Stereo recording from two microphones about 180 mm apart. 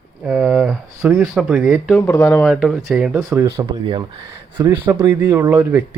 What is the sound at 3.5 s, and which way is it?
Speech, 25° right (ahead or behind).